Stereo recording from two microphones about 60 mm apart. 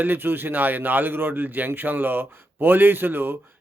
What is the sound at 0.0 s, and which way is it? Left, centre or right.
A man's voice, right.